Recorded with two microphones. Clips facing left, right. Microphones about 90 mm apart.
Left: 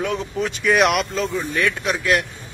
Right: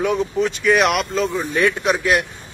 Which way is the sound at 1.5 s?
25° right (ahead or behind).